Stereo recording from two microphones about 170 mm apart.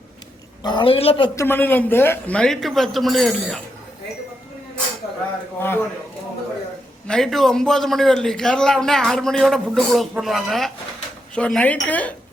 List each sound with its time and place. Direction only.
0.6 s a woman's voice: 30° left (ahead or behind)
1.4 s a man's voice: 10° left (ahead or behind)
5.5 s speech: 10° left (ahead or behind)
7.1 s a man's voice: centre (ahead or behind)